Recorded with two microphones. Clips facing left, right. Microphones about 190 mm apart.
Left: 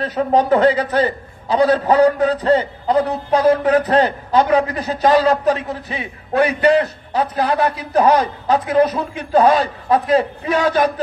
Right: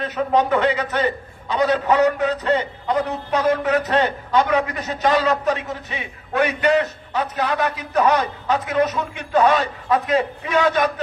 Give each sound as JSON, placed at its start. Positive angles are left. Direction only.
{"t": 0.0, "sound": "a man's voice", "side_deg": 35}